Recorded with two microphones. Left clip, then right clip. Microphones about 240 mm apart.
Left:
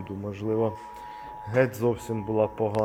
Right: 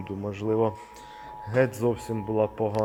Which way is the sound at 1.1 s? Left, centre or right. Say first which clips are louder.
Right 1 dB; centre.